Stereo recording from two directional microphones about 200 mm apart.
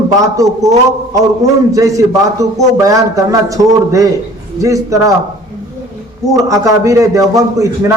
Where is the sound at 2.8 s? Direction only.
15° right (ahead or behind).